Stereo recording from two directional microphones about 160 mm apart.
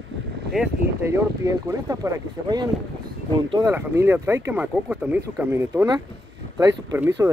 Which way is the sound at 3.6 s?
15° right (ahead or behind).